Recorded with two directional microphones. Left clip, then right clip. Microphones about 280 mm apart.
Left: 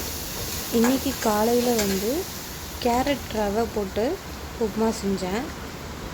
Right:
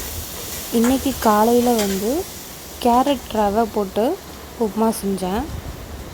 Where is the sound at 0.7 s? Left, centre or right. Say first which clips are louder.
Right 4 dB; centre.